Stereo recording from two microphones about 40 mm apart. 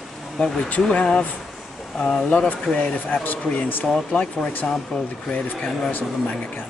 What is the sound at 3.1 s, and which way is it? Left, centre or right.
Speech, left.